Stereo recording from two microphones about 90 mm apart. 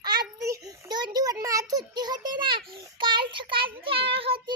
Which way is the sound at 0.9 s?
50° right (ahead or behind).